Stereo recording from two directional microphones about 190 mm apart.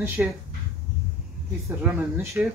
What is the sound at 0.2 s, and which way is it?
Speech, 5° right (ahead or behind).